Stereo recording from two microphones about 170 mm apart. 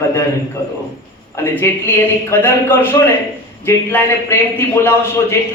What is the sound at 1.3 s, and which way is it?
A man's voice, 15° left (ahead or behind).